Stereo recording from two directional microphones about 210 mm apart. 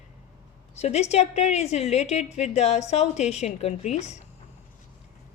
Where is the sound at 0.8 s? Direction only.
30° left (ahead or behind).